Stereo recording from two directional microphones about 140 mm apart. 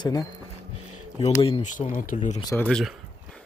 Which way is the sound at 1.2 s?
40° left (ahead or behind).